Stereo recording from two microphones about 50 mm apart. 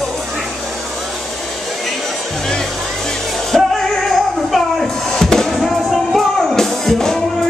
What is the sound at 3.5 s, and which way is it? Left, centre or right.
Music, centre.